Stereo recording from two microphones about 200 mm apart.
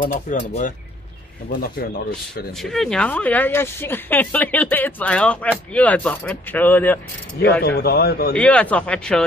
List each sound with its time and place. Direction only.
0.0 s speech: 40° left (ahead or behind)
1.5 s a man's voice: 45° left (ahead or behind)
2.5 s speech: centre (ahead or behind)
7.6 s a man's voice: 50° left (ahead or behind)
8.4 s speech: 5° left (ahead or behind)